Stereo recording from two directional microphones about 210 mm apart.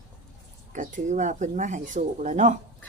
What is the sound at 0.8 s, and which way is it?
Speech, 35° right (ahead or behind).